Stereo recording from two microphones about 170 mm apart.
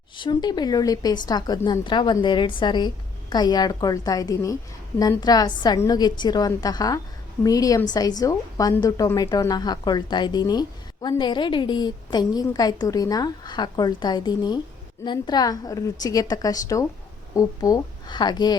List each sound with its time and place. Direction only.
0.2 s a woman's voice: 25° left (ahead or behind)